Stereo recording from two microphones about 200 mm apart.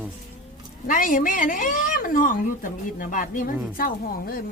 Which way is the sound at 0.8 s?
45° left (ahead or behind).